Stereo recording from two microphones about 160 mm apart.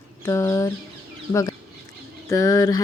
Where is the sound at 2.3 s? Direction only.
20° left (ahead or behind).